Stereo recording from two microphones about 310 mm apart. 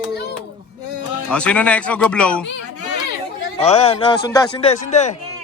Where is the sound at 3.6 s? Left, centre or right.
Centre.